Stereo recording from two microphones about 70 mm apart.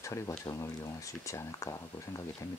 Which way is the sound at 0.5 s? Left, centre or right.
Left.